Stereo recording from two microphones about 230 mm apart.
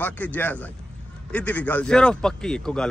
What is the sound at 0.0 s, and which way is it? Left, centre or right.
Speech, centre.